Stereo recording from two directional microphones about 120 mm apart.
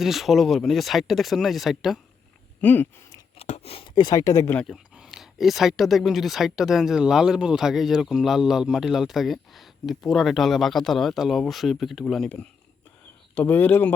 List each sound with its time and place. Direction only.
0.0 s speech: centre (ahead or behind)
2.6 s speech: 15° left (ahead or behind)
3.3 s a sound: 60° left (ahead or behind)
3.9 s speech: 30° left (ahead or behind)
4.5 s speech: 5° left (ahead or behind)
13.3 s speech: 15° left (ahead or behind)